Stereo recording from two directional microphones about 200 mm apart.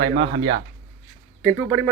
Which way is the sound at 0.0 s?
65° right (ahead or behind).